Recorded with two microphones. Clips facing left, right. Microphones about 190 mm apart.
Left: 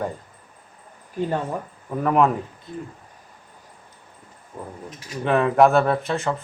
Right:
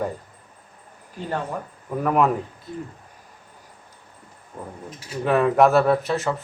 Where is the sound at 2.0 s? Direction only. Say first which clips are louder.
Left 1 dB; 5° right (ahead or behind).